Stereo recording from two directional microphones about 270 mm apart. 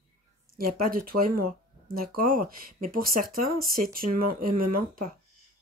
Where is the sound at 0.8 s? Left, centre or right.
Right.